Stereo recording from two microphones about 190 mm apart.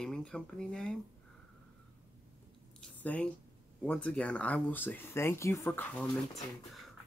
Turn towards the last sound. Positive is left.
turn(degrees=5)  # may be behind; listen again after turning